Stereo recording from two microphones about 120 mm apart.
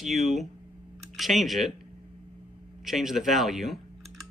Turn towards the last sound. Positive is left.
turn(degrees=0)  # may be behind; listen again after turning